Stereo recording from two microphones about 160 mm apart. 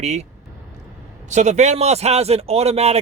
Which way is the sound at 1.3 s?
45° right (ahead or behind).